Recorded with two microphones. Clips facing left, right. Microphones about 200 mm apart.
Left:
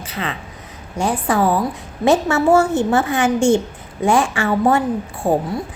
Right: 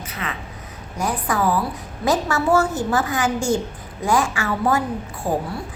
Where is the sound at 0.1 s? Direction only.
30° left (ahead or behind).